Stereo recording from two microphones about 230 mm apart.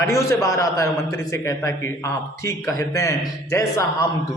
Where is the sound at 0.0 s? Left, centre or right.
Centre.